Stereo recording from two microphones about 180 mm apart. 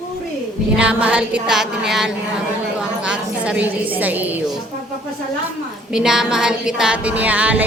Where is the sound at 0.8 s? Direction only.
5° right (ahead or behind).